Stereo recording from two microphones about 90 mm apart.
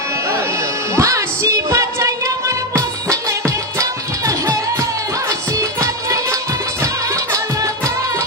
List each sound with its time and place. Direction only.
0.9 s music: 35° right (ahead or behind)